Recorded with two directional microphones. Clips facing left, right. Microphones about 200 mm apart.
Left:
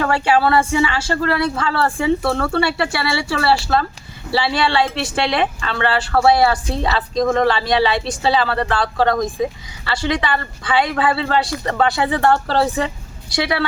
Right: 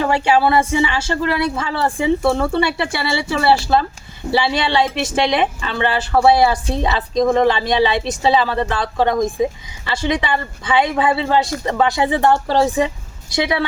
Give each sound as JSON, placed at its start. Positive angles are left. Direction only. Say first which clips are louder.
{"t": 0.0, "sound": "speech", "louder": "right 1 dB", "side_deg": -20}